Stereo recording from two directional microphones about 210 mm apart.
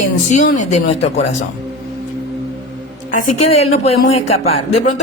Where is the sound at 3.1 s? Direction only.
40° left (ahead or behind).